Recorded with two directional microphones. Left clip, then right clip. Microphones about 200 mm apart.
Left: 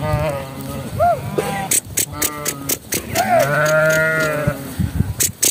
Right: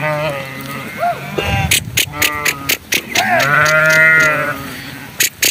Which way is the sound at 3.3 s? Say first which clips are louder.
Right 3 dB; 25° left (ahead or behind).